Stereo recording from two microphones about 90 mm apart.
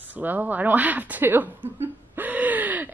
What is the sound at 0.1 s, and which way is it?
Speech, 20° right (ahead or behind).